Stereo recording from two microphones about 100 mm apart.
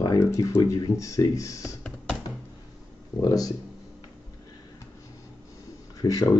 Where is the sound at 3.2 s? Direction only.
35° left (ahead or behind).